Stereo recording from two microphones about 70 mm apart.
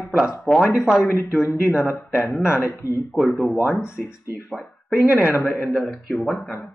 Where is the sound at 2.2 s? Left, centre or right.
Centre.